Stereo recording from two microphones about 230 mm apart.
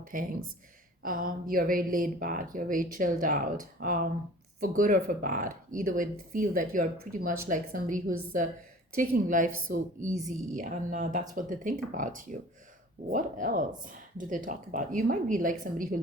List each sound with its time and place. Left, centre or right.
0.1 s speech: right